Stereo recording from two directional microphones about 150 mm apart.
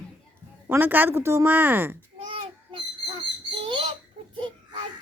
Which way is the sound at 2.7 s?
35° right (ahead or behind).